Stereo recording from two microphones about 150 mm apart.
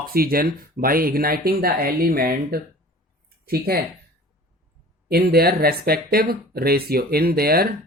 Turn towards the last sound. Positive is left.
turn(degrees=-90)